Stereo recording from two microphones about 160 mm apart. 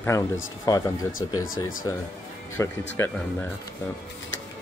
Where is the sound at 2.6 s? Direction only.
20° left (ahead or behind).